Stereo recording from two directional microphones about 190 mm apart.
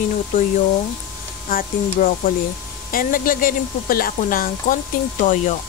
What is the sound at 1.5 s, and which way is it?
Speech, 50° left (ahead or behind).